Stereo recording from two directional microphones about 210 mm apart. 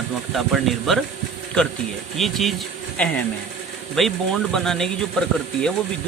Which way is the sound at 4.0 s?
Centre (ahead or behind).